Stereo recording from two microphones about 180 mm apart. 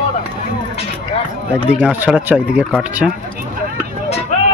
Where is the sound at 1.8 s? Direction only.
5° right (ahead or behind).